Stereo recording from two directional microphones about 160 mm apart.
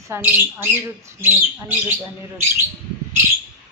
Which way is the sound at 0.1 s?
10° right (ahead or behind).